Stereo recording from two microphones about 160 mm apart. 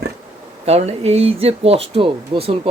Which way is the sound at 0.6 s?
40° right (ahead or behind).